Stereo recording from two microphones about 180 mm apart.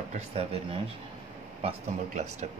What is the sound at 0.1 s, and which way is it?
Speech, 35° right (ahead or behind).